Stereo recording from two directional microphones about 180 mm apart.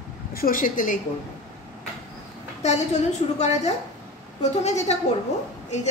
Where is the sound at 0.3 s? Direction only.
55° left (ahead or behind).